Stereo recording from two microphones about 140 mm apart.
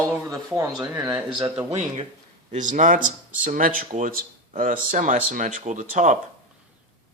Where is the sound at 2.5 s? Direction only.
60° right (ahead or behind).